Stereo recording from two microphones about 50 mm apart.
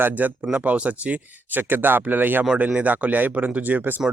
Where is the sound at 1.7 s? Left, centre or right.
Right.